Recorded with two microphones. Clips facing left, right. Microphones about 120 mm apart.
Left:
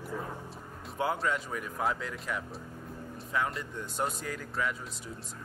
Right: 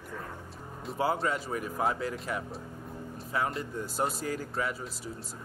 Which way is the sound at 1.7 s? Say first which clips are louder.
Right 2 dB; 5° right (ahead or behind).